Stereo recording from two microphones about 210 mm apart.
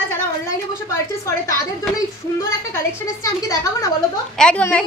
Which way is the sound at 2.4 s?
15° left (ahead or behind).